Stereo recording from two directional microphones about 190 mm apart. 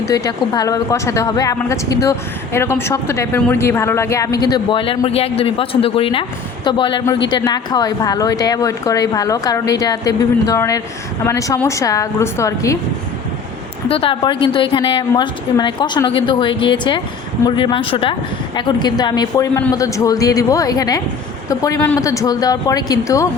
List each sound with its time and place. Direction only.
0.0 s a woman's voice: 20° left (ahead or behind)
13.8 s a woman's voice: 30° left (ahead or behind)